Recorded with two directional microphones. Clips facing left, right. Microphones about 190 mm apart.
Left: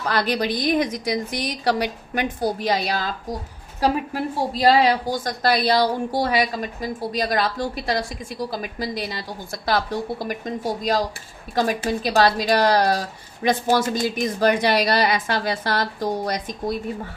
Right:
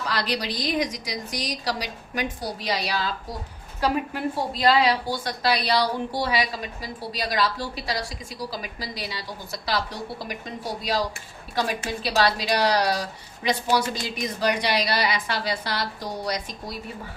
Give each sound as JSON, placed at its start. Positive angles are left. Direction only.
{"t": 0.0, "sound": "a woman's voice", "side_deg": 50}
{"t": 4.6, "sound": "a woman's voice", "side_deg": 40}